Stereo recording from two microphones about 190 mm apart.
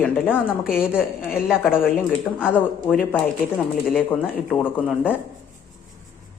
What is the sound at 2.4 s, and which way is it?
A woman's voice, 5° left (ahead or behind).